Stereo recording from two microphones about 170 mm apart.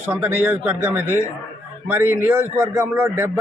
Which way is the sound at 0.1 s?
10° right (ahead or behind).